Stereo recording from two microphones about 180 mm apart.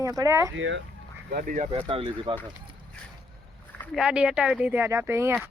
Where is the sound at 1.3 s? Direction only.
50° right (ahead or behind).